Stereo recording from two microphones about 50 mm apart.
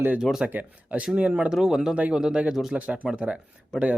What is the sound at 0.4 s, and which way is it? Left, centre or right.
Speech, right.